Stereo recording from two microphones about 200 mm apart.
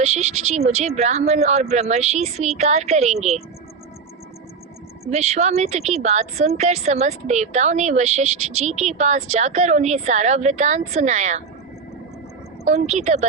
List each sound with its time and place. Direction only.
0.0 s a woman's voice: 35° right (ahead or behind)
5.1 s a woman's voice: 35° right (ahead or behind)
12.6 s a woman's voice: 35° right (ahead or behind)